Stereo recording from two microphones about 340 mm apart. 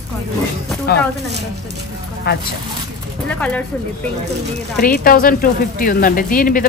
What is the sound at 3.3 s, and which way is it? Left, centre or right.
Speech, centre.